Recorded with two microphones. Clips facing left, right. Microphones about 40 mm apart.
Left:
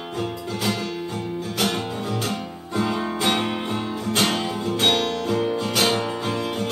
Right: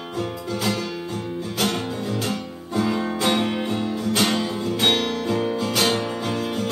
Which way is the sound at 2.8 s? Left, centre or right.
Centre.